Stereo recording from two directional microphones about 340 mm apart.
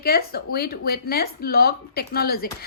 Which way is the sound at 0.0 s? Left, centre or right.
Left.